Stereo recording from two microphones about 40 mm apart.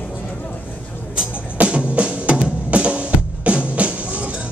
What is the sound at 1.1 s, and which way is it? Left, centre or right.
Music, right.